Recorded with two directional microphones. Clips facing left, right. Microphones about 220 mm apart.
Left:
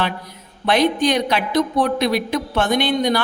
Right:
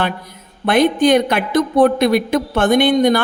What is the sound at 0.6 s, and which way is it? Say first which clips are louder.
A woman's voice: right 4 dB; 50° right (ahead or behind).